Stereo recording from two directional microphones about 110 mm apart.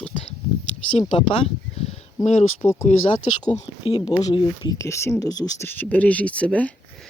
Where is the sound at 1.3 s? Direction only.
75° left (ahead or behind).